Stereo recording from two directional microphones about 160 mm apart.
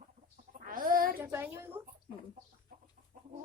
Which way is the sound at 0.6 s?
60° right (ahead or behind).